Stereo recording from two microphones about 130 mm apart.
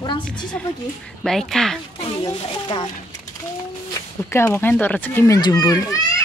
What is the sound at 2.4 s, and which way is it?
Speech, 40° left (ahead or behind).